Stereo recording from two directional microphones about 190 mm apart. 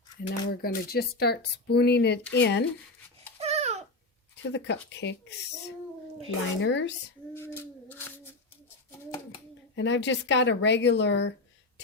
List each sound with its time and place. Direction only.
0.2 s speech: 50° left (ahead or behind)
3.3 s babbling: 35° right (ahead or behind)
4.5 s speech: 70° left (ahead or behind)
6.6 s speech: 70° left (ahead or behind)
7.3 s a sound: 10° left (ahead or behind)
9.7 s speech: 70° left (ahead or behind)